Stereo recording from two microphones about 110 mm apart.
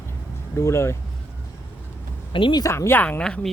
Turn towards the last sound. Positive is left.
turn(degrees=10)  # may be behind; listen again after turning